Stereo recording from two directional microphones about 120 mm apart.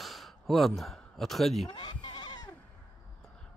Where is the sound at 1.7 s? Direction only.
40° left (ahead or behind).